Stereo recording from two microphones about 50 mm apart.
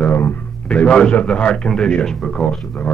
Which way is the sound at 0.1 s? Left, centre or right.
Left.